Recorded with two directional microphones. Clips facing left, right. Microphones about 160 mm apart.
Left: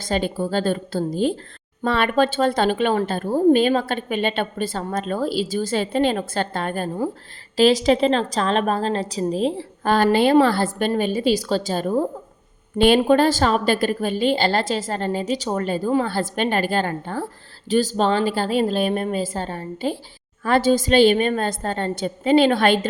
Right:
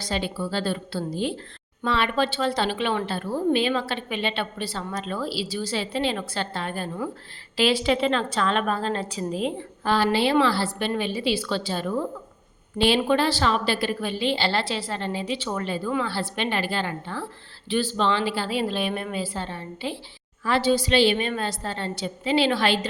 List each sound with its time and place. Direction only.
0.0 s a woman's voice: 50° left (ahead or behind)
9.8 s speech: 50° left (ahead or behind)